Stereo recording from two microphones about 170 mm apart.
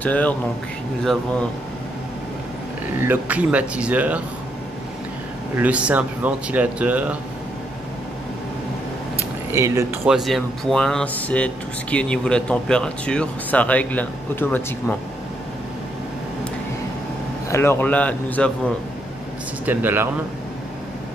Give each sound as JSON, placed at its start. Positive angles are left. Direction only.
{"t": 0.0, "sound": "speech", "side_deg": 10}
{"t": 3.0, "sound": "speech", "side_deg": -10}
{"t": 5.6, "sound": "speech", "side_deg": -5}
{"t": 9.5, "sound": "speech", "side_deg": -15}
{"t": 10.0, "sound": "speech", "side_deg": 0}
{"t": 17.5, "sound": "speech", "side_deg": 15}
{"t": 19.6, "sound": "speech", "side_deg": -10}